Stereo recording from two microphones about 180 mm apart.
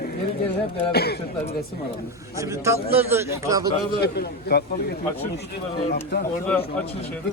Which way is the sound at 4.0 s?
60° left (ahead or behind).